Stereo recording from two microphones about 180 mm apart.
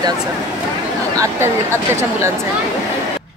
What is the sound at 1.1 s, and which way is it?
Speech, 15° right (ahead or behind).